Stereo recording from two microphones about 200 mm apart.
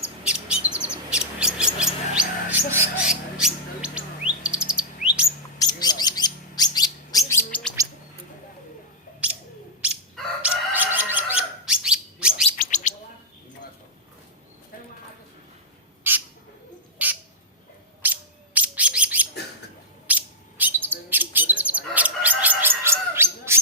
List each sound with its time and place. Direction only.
0.3 s bird: 5° right (ahead or behind)
5.5 s bird: 20° left (ahead or behind)
10.4 s bird: 10° right (ahead or behind)
12.5 s bird: 40° left (ahead or behind)
16.1 s bird: 10° right (ahead or behind)
17.0 s squawk: 10° right (ahead or behind)
18.0 s bird: 10° right (ahead or behind)